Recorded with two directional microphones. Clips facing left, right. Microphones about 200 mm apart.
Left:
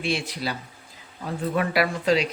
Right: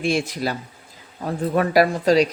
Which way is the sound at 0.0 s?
45° right (ahead or behind).